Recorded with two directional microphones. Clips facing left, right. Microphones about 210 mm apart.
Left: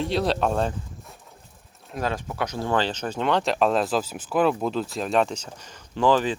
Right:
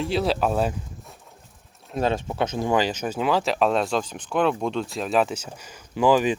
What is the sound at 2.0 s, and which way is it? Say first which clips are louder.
Speech: right 4 dB; 25° right (ahead or behind).